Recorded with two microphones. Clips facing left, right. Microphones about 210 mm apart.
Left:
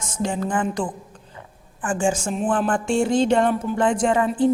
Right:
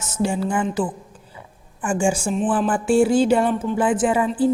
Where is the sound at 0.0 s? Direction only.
10° right (ahead or behind).